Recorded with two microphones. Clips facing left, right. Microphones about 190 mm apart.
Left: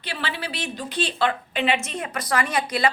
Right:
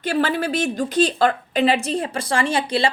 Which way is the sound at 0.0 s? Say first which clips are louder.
Right 10 dB; 45° right (ahead or behind).